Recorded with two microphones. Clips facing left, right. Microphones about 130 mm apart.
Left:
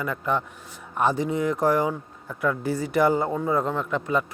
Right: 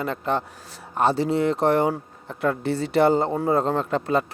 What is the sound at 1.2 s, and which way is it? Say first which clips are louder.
Speech: right 3 dB; 80° right.